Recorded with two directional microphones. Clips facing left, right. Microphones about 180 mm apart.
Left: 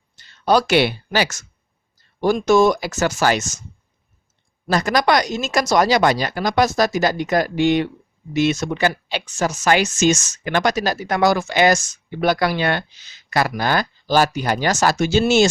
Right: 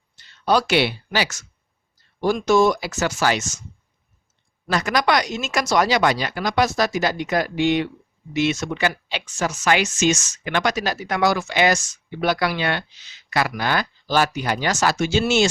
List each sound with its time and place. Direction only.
0.2 s speech: 45° left (ahead or behind)
4.7 s speech: 40° left (ahead or behind)